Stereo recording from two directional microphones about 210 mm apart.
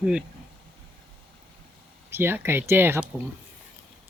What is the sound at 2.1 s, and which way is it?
Speech, 10° right (ahead or behind).